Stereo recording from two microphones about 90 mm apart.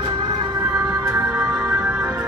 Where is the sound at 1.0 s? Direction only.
35° right (ahead or behind).